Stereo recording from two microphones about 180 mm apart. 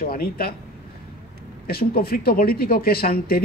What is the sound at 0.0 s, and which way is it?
Speech, 55° left (ahead or behind).